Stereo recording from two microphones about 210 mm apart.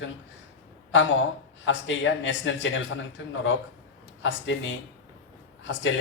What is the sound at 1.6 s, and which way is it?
Speech, 65° left (ahead or behind).